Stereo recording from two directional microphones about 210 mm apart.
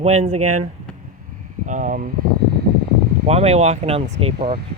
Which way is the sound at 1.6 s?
35° right (ahead or behind).